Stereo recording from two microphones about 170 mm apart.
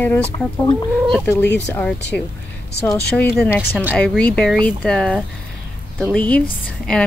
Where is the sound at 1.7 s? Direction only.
10° left (ahead or behind).